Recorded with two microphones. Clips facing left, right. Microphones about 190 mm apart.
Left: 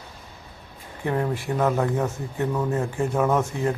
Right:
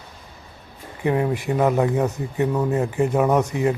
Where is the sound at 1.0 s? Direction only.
15° right (ahead or behind).